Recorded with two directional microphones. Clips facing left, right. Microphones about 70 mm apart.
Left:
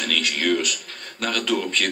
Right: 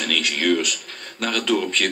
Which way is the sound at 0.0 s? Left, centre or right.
Right.